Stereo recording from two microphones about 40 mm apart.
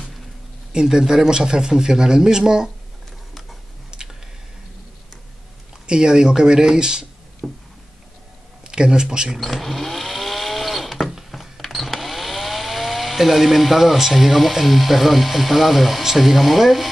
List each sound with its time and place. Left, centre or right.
0.7 s a man's voice: centre
3.9 s tick: centre
5.9 s speech: centre
7.4 s a sound: centre
8.6 s speech: right
9.4 s a sound: centre